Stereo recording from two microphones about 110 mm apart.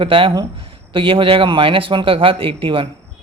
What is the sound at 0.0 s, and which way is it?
Speech, 50° right (ahead or behind).